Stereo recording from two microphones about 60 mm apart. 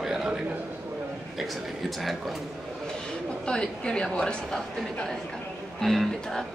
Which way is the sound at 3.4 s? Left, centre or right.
Centre.